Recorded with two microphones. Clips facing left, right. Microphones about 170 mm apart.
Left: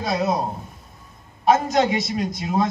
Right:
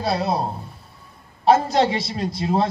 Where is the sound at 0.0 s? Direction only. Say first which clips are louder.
Even; 30° right (ahead or behind).